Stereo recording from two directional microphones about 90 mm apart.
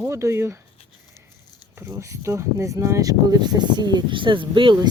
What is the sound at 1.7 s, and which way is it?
Speech, 25° right (ahead or behind).